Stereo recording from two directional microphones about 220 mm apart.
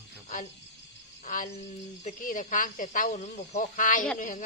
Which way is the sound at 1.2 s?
35° left (ahead or behind).